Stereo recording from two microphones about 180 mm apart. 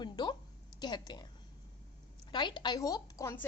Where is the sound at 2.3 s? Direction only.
25° left (ahead or behind).